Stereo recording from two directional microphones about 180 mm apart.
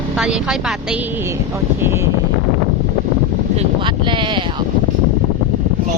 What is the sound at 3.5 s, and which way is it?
Speech, 30° right (ahead or behind).